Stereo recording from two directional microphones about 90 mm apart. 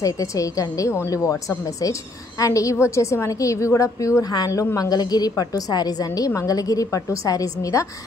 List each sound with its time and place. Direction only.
0.0 s a woman's voice: 35° left (ahead or behind)